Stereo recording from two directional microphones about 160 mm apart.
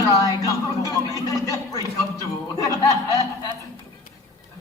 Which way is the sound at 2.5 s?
20° left (ahead or behind).